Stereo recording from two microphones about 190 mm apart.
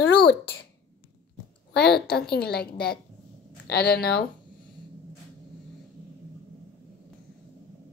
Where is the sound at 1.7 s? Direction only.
60° left (ahead or behind).